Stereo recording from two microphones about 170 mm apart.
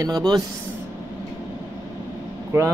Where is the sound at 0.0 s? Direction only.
25° right (ahead or behind).